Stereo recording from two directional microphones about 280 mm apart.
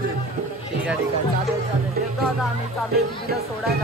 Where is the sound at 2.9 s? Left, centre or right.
Right.